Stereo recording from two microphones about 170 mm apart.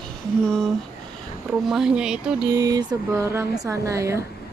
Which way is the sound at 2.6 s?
20° right (ahead or behind).